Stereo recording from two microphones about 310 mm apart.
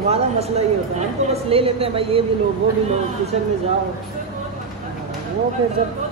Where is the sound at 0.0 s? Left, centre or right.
Centre.